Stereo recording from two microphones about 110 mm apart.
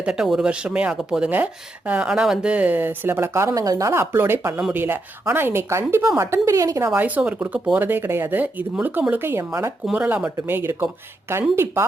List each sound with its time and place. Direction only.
0.0 s speech: 5° right (ahead or behind); by 9.7 s 25° right (ahead or behind)
9.8 s speech: 10° right (ahead or behind)